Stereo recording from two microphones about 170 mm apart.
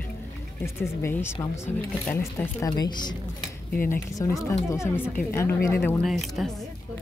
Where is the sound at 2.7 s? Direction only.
25° left (ahead or behind).